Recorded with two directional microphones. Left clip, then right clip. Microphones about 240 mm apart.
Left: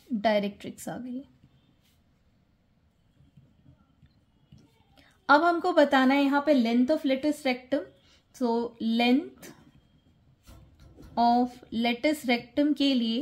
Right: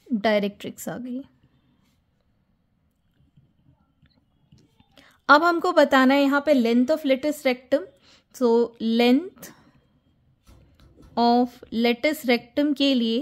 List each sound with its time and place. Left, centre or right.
0.2 s speech: right
4.6 s speech: right
11.1 s speech: right